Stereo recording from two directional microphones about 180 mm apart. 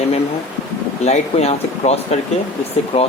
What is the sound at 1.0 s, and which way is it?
Speech, 35° left (ahead or behind).